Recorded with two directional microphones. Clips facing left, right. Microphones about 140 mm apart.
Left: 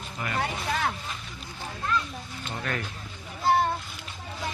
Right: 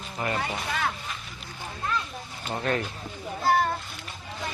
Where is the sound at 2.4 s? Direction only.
30° right (ahead or behind).